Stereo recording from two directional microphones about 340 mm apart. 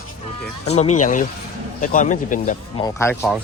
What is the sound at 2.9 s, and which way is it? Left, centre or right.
Speech, centre.